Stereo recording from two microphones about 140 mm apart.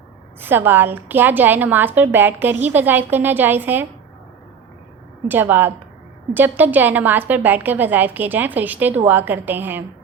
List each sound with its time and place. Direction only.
0.3 s a woman's voice: 15° right (ahead or behind)
5.3 s a woman's voice: 15° right (ahead or behind)